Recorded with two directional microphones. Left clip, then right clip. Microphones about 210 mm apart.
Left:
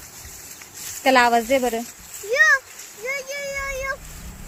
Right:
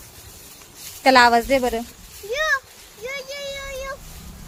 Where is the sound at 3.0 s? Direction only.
30° right (ahead or behind).